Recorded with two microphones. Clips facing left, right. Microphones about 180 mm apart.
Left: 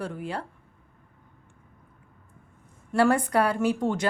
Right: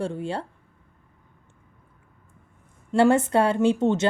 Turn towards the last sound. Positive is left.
turn(degrees=-25)  # may be behind; listen again after turning